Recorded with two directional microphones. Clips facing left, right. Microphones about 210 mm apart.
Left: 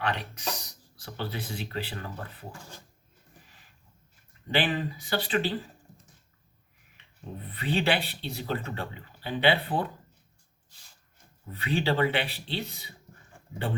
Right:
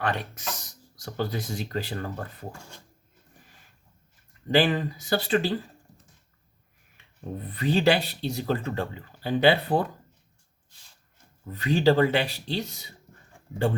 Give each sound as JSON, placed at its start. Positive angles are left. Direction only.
{"t": 0.0, "sound": "speech", "side_deg": -45}
{"t": 4.5, "sound": "speech", "side_deg": -45}
{"t": 7.5, "sound": "speech", "side_deg": -40}
{"t": 11.5, "sound": "speech", "side_deg": -40}